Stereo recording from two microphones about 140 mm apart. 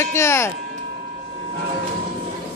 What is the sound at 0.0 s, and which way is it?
Speech, 20° left (ahead or behind).